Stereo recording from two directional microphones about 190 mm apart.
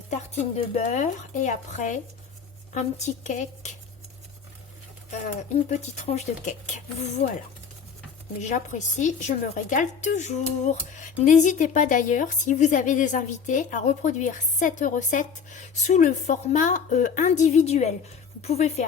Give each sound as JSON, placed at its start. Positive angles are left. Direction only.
{"t": 0.1, "sound": "a woman's voice", "side_deg": 35}
{"t": 5.1, "sound": "a woman's voice", "side_deg": 40}
{"t": 8.4, "sound": "a woman's voice", "side_deg": 40}